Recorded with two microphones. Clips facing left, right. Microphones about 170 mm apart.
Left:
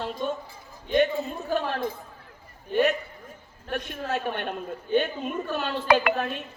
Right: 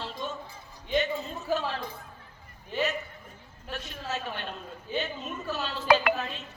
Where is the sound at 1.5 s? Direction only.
55° left (ahead or behind).